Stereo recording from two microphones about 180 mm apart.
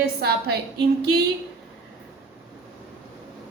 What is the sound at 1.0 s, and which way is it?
Speech, 60° right (ahead or behind).